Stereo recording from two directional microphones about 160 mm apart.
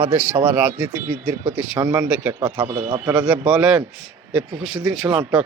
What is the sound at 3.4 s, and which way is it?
Speech, 5° right (ahead or behind).